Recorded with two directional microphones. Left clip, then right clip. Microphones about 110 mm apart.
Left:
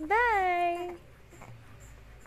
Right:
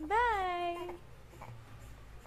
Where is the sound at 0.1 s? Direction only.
40° left (ahead or behind).